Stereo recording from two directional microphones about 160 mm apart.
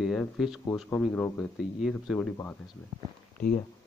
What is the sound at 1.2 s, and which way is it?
Speech, 10° left (ahead or behind).